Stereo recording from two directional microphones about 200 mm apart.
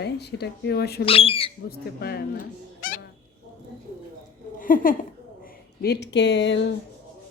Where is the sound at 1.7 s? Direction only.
50° left (ahead or behind).